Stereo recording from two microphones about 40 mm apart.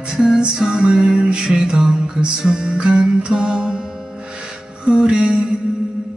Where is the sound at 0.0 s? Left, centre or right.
Right.